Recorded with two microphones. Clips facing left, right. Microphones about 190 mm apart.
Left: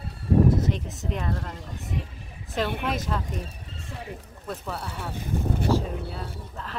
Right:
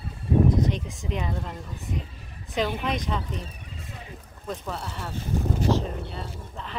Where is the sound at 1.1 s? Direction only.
Centre (ahead or behind).